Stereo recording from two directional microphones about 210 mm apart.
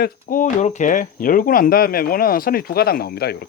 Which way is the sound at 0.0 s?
40° left (ahead or behind).